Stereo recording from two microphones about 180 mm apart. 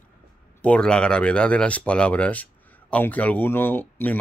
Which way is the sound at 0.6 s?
5° left (ahead or behind).